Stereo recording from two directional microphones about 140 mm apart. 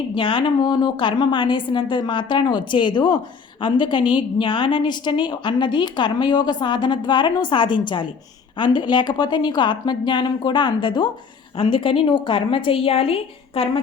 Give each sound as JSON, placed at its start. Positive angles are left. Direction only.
{"t": 0.1, "sound": "a woman's voice", "side_deg": 35}